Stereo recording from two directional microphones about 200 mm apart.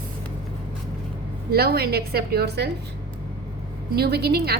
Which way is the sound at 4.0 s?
55° right (ahead or behind).